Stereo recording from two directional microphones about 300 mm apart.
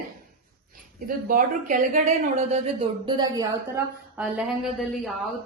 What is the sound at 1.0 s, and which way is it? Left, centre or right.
A woman's voice, right.